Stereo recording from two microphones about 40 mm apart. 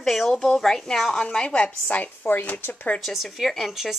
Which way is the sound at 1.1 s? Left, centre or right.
Left.